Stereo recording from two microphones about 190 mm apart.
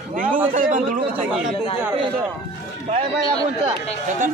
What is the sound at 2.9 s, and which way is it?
Speech, 25° right (ahead or behind).